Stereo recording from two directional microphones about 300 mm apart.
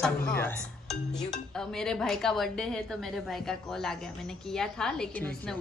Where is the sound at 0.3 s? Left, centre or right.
Centre.